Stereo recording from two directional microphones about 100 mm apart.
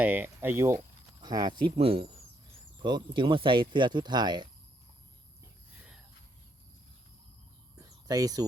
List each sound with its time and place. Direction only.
0.0 s speech: 20° right (ahead or behind)
1.2 s speech: 45° right (ahead or behind)
1.8 s speech: 65° right (ahead or behind)
2.7 s speech: 50° right (ahead or behind)
7.8 s a sound: 35° right (ahead or behind)